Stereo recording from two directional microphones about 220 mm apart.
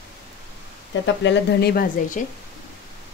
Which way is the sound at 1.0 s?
55° left (ahead or behind).